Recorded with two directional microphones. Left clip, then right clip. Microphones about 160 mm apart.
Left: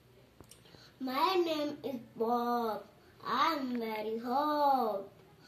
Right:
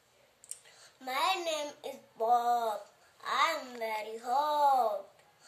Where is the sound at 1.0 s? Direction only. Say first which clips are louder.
Left 1 dB; 20° right (ahead or behind).